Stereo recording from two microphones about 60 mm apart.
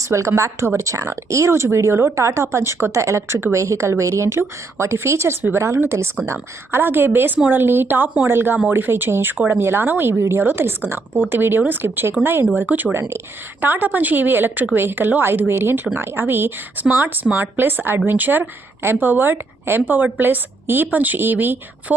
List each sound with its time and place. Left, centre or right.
0.0 s speech: right
6.2 s a woman's voice: right
10.2 s a woman's voice: right
12.9 s speech: right
13.6 s a woman's voice: right